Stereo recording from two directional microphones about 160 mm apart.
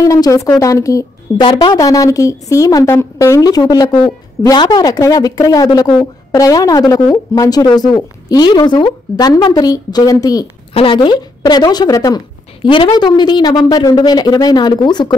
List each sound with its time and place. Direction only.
0.0 s a woman's voice: 20° left (ahead or behind)
10.7 s a woman's voice: 35° left (ahead or behind)